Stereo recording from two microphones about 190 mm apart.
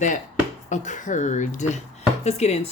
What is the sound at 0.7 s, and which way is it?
Speech, 40° left (ahead or behind).